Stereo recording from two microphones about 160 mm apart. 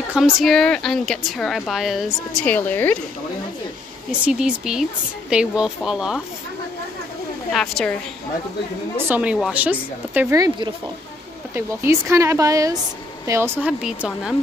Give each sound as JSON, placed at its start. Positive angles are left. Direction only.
{"t": 0.1, "sound": "speech", "side_deg": 0}
{"t": 2.4, "sound": "speech", "side_deg": 10}
{"t": 4.1, "sound": "speech", "side_deg": -5}
{"t": 7.5, "sound": "speech", "side_deg": 0}
{"t": 8.9, "sound": "a woman's voice", "side_deg": -10}
{"t": 10.3, "sound": "speech", "side_deg": -25}